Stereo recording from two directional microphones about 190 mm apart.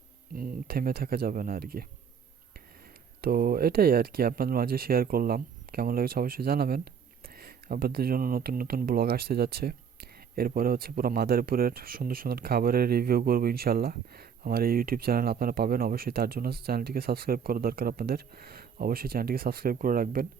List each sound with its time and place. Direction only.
0.3 s speech: 50° right (ahead or behind)
3.2 s speech: 55° right (ahead or behind)